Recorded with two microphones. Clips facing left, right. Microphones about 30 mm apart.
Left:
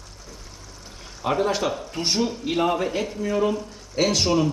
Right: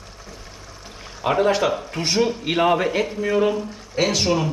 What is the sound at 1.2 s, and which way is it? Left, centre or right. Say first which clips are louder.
A man's voice: right 4 dB; right.